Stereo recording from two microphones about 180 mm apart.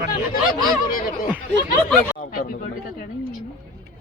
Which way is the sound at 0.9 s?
50° left (ahead or behind).